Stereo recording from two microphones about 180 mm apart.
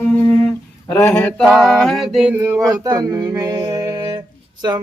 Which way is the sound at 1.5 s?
Centre (ahead or behind).